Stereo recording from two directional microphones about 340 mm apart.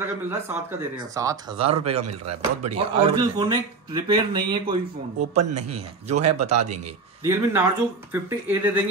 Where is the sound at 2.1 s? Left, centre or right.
Right.